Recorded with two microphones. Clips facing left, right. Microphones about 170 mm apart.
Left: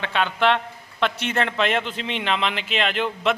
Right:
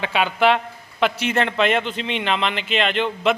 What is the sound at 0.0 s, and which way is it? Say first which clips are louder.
A man's voice: right 3 dB; 10° right (ahead or behind).